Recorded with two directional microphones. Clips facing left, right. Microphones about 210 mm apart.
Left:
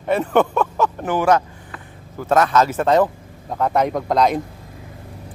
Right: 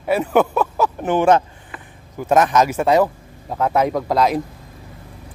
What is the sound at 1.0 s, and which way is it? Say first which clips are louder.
Speech: right 3 dB; 25° right (ahead or behind).